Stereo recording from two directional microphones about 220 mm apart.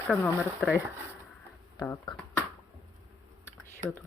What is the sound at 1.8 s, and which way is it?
Speech, 20° left (ahead or behind).